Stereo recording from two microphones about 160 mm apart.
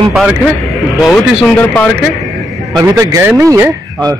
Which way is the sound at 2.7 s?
20° right (ahead or behind).